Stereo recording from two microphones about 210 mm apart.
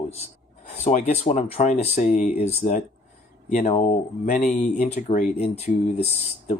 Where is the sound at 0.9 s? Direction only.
35° left (ahead or behind).